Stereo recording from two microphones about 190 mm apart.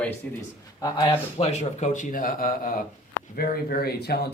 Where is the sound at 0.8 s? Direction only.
20° left (ahead or behind).